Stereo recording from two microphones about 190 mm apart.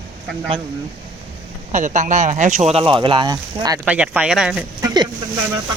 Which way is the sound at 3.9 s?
5° right (ahead or behind).